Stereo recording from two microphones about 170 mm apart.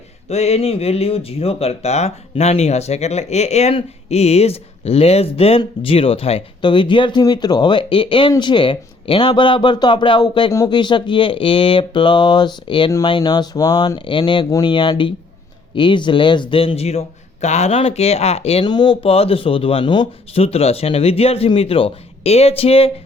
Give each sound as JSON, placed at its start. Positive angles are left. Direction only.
{"t": 0.3, "sound": "speech", "side_deg": 40}